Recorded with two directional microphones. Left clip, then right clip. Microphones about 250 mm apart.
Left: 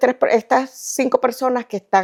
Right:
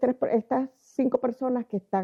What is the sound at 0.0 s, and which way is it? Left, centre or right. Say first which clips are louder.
Speech: left 9 dB; centre.